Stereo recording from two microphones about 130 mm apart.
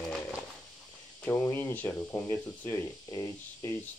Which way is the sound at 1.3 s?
20° left (ahead or behind).